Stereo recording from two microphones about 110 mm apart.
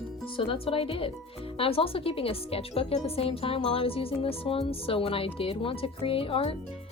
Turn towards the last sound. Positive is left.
turn(degrees=55)  # may be behind; listen again after turning